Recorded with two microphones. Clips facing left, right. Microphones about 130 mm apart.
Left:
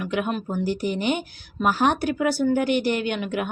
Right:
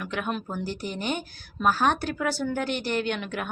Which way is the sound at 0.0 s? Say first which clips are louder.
Left 5 dB; 5° left (ahead or behind).